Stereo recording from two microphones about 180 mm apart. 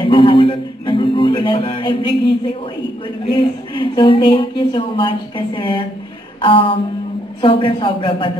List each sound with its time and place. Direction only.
0.0 s music: 30° left (ahead or behind)
3.3 s a woman's voice: 25° left (ahead or behind)